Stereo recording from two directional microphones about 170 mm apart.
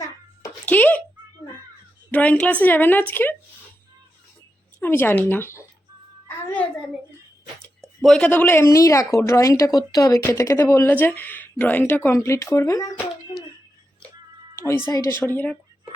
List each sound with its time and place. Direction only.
0.6 s a sound: 10° left (ahead or behind)
2.0 s speech: 10° left (ahead or behind)
4.8 s speech: 10° left (ahead or behind)
6.2 s a sound: 10° left (ahead or behind)
8.0 s speech: 5° left (ahead or behind); by 13.0 s 20° left (ahead or behind)
14.8 s a woman's voice: 20° left (ahead or behind)